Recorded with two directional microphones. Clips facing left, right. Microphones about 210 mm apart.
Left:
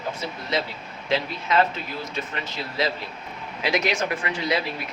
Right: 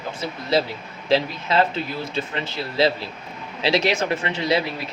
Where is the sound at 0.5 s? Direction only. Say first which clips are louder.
Right 7 dB; 30° right (ahead or behind).